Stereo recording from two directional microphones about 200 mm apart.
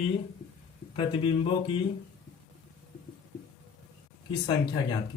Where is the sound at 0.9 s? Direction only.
25° left (ahead or behind).